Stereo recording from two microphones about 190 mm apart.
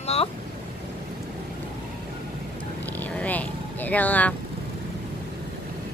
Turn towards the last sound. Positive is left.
turn(degrees=10)  # may be behind; listen again after turning